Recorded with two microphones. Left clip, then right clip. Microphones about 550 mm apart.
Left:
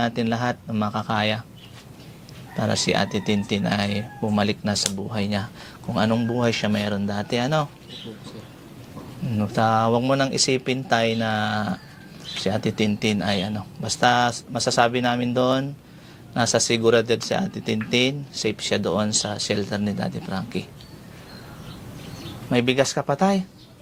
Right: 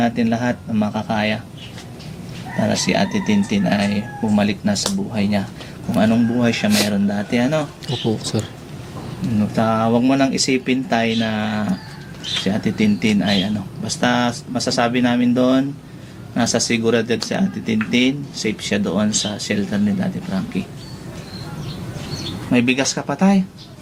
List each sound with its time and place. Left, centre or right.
0.0 s speech: left
2.6 s speech: left
9.5 s speech: left
22.5 s speech: left